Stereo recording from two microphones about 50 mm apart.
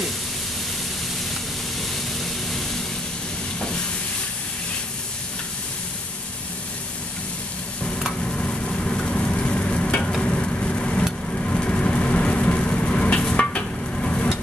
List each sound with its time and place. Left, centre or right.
8.3 s stir: centre
10.2 s vehicle: left
13.2 s a sound: left